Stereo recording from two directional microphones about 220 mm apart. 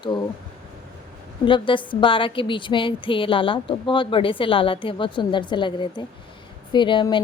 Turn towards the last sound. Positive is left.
turn(degrees=20)  # may be behind; listen again after turning